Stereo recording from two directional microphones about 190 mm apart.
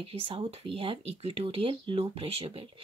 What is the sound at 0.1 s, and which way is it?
Speech, 30° right (ahead or behind).